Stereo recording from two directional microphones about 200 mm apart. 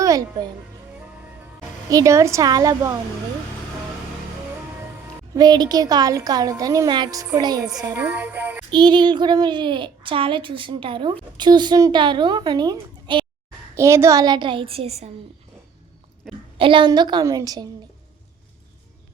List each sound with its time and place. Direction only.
0.0 s a child's voice: 15° right (ahead or behind)
1.9 s a woman's voice: 15° right (ahead or behind)
5.3 s a child's voice: 20° right (ahead or behind)
8.7 s a child's voice: 20° right (ahead or behind)
16.2 s a woman's voice: centre (ahead or behind)
16.6 s a child's voice: 25° right (ahead or behind)